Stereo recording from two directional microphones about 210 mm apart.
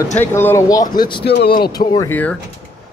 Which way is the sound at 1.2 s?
50° left (ahead or behind).